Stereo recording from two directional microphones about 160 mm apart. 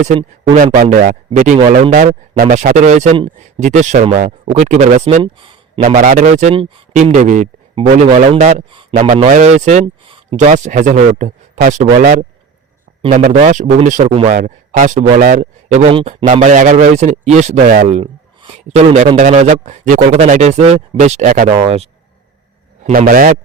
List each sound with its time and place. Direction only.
0.5 s a man's voice: 55° right (ahead or behind)
5.2 s a sound: 30° right (ahead or behind)
5.9 s a man's voice: 55° right (ahead or behind)
9.8 s a sound: 35° right (ahead or behind)
10.3 s a man's voice: 50° right (ahead or behind)
13.0 s a man's voice: 45° right (ahead or behind)
14.3 s a man's voice: 55° right (ahead or behind)
15.9 s speech: 35° right (ahead or behind)
16.2 s a man's voice: 55° right (ahead or behind)
22.9 s a man's voice: 60° right (ahead or behind)